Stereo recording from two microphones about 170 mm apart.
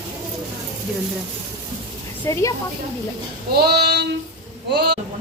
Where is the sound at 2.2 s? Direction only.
20° left (ahead or behind).